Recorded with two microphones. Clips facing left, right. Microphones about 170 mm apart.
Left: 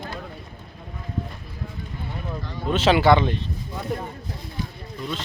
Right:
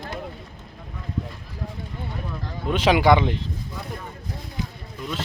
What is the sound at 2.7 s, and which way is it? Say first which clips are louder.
Speech: even; 15° right (ahead or behind).